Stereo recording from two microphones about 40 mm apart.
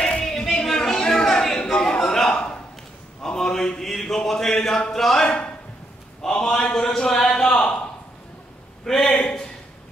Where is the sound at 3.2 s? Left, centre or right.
Centre.